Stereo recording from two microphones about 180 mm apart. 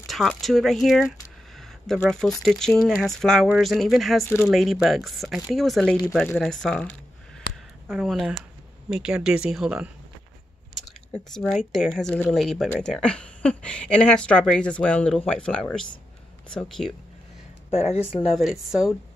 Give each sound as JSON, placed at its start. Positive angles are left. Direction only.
{"t": 0.0, "sound": "speech", "side_deg": 0}
{"t": 7.9, "sound": "speech", "side_deg": 0}
{"t": 10.9, "sound": "speech", "side_deg": 0}
{"t": 17.6, "sound": "speech", "side_deg": 35}
{"t": 18.3, "sound": "speech", "side_deg": 0}